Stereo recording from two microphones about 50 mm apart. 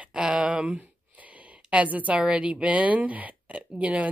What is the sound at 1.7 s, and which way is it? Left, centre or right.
Speech, right.